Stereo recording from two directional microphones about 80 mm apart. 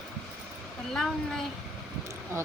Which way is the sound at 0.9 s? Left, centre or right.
Centre.